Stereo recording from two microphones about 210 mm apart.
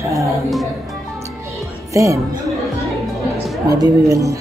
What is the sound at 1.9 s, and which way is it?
Speech, 15° right (ahead or behind).